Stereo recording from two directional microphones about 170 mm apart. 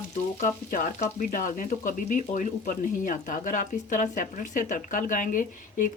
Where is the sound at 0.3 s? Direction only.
50° left (ahead or behind).